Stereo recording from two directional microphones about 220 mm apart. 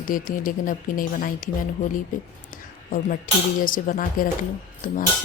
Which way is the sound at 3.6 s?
40° left (ahead or behind).